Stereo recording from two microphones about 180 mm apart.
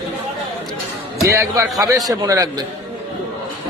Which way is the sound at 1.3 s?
15° right (ahead or behind).